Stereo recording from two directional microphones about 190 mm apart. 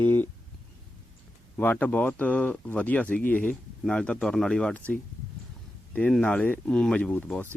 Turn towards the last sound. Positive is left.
turn(degrees=5)  # may be behind; listen again after turning